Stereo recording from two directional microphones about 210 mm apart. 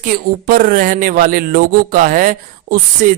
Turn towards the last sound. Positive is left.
turn(degrees=-40)  # may be behind; listen again after turning